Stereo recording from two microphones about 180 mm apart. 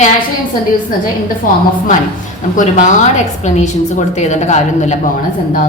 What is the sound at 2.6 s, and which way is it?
Speech, 45° left (ahead or behind).